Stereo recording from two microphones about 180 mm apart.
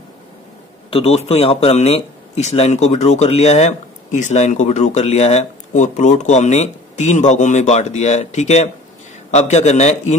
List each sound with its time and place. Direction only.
0.8 s a man's voice: 35° left (ahead or behind)